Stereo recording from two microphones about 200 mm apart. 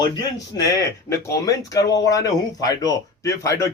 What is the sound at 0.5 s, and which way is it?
Speech, 15° left (ahead or behind).